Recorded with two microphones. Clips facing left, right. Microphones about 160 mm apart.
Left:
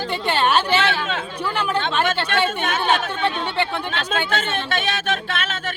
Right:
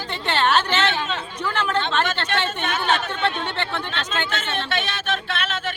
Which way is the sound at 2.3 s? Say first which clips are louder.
Left 3 dB; 50° left (ahead or behind).